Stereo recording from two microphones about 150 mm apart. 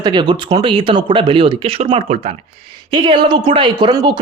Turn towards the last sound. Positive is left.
turn(degrees=-30)  # may be behind; listen again after turning